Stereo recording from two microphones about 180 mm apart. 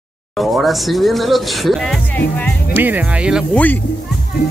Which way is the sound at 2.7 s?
10° right (ahead or behind).